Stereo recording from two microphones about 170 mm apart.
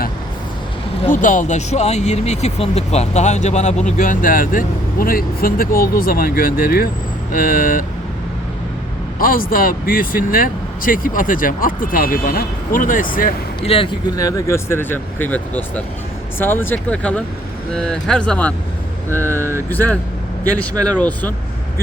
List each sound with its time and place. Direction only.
1.1 s speech: 50° left (ahead or behind)
3.9 s speech: 55° left (ahead or behind)
9.1 s speech: 55° left (ahead or behind)
13.6 s speech: 30° left (ahead or behind)
14.2 s speech: 20° left (ahead or behind)